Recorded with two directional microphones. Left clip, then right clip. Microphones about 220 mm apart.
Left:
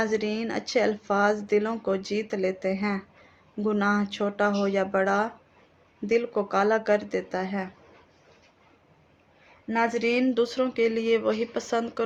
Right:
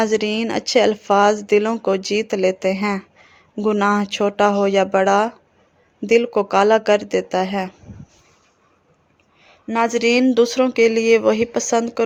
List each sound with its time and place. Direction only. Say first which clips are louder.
0.0 s speech: right 8 dB; 40° right (ahead or behind)
9.6 s speech: right 8 dB; 45° right (ahead or behind)